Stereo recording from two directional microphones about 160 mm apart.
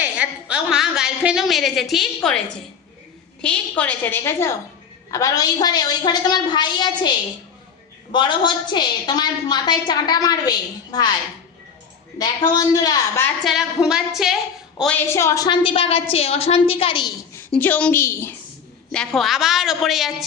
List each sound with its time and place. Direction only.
0.0 s a woman's voice: 10° right (ahead or behind)
3.4 s a woman's voice: 10° left (ahead or behind); by 7.1 s 25° left (ahead or behind)
8.1 s a woman's voice: 30° left (ahead or behind)
12.2 s a woman's voice: 25° left (ahead or behind)
13.4 s a woman's voice: centre (ahead or behind)
15.1 s a woman's voice: 15° left (ahead or behind)
15.4 s a woman's voice: 35° left (ahead or behind)
17.5 s a woman's voice: 10° left (ahead or behind)
18.9 s a woman's voice: 5° left (ahead or behind)